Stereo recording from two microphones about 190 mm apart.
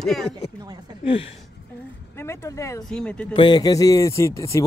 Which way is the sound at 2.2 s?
15° left (ahead or behind).